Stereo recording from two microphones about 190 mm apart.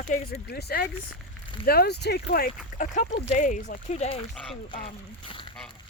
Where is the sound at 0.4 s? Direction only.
55° left (ahead or behind).